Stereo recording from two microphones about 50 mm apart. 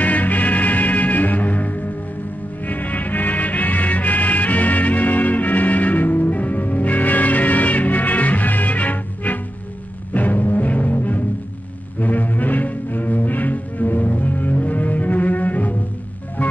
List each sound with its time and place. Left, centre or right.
0.0 s music: left